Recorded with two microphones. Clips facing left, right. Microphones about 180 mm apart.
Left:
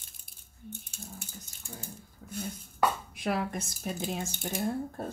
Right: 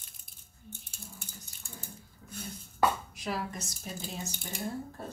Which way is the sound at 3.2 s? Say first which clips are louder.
Left 5 dB; 55° left (ahead or behind).